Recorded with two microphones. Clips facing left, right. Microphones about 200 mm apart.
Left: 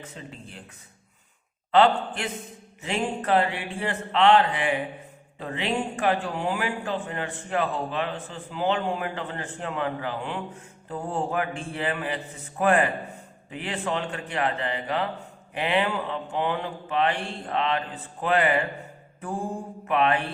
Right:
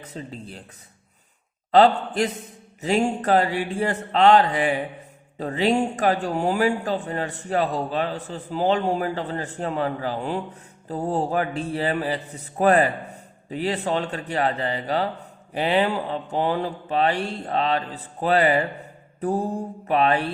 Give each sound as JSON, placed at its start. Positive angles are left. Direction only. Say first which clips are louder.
{"t": 0.0, "sound": "speech", "louder": "right 5 dB", "side_deg": -35}
{"t": 1.7, "sound": "speech", "louder": "right 3 dB", "side_deg": -40}